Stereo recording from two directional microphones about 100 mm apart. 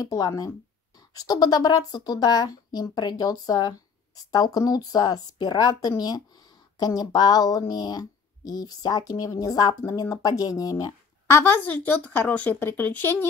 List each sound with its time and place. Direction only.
0.0 s speech: 35° left (ahead or behind)
11.2 s a woman's voice: 25° left (ahead or behind)